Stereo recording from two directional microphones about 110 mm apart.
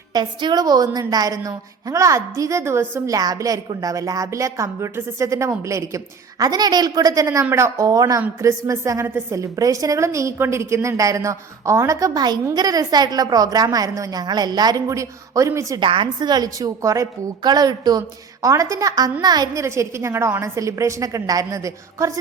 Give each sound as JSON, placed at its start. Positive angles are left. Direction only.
{"t": 0.1, "sound": "a woman's voice", "side_deg": -45}
{"t": 15.8, "sound": "a woman's voice", "side_deg": -50}